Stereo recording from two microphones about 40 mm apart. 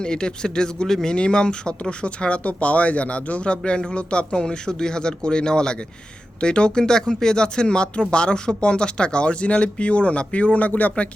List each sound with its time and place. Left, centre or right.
0.0 s speech: left
1.1 s speech: left